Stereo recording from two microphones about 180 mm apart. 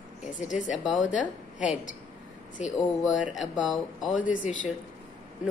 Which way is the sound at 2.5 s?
40° left (ahead or behind).